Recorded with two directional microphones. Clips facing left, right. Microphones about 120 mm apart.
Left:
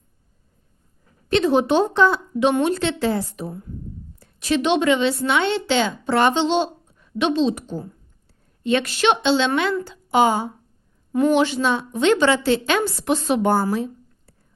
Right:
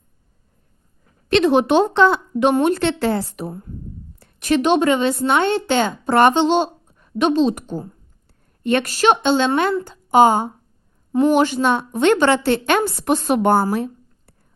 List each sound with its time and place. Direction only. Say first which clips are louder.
1.3 s a woman's voice: right 3 dB; 70° right (ahead or behind)
2.5 s a woman's voice: right 4 dB; 50° right (ahead or behind)
11.1 s a woman's voice: right 2 dB; 30° right (ahead or behind)
11.3 s a woman's voice: right 2 dB; 45° right (ahead or behind)
13.7 s a sound: right 2 dB; 60° right (ahead or behind)